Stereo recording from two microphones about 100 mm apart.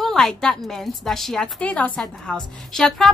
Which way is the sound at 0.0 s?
5° left (ahead or behind).